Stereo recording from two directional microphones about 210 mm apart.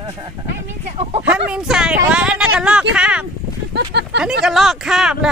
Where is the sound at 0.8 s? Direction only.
30° right (ahead or behind).